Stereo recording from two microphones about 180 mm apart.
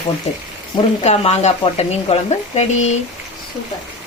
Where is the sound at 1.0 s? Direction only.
40° left (ahead or behind).